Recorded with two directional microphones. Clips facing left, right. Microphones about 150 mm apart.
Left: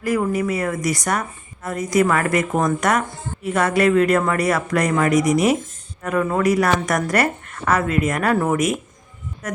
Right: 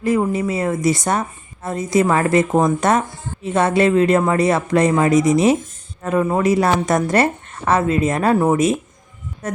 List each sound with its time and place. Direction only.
0.0 s a woman's voice: 25° right (ahead or behind)